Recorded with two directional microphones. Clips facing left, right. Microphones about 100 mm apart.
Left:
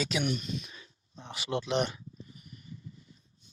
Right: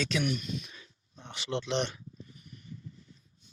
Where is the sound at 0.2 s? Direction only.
30° left (ahead or behind).